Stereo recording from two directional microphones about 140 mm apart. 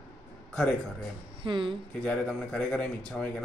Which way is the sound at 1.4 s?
35° right (ahead or behind).